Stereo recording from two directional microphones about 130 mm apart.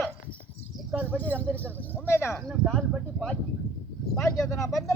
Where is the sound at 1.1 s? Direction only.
15° left (ahead or behind).